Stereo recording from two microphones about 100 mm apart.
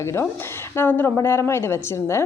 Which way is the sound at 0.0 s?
30° left (ahead or behind).